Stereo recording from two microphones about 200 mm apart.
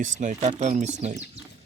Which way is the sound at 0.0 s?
35° right (ahead or behind).